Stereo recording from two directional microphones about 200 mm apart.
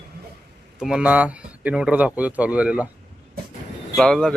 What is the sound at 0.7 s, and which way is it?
Speech, 5° right (ahead or behind).